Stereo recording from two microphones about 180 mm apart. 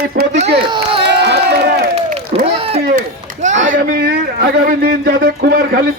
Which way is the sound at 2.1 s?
35° right (ahead or behind).